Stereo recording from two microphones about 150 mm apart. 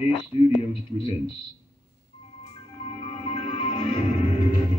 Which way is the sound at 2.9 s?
40° left (ahead or behind).